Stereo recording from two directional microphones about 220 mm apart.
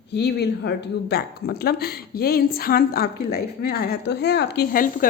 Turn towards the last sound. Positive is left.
turn(degrees=45)  # may be behind; listen again after turning